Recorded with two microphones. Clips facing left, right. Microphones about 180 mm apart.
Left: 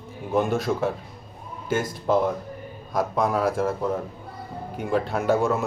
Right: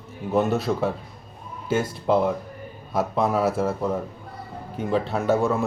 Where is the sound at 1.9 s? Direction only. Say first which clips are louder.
Even; 25° right (ahead or behind).